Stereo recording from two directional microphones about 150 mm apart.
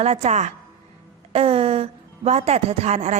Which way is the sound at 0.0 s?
45° right (ahead or behind).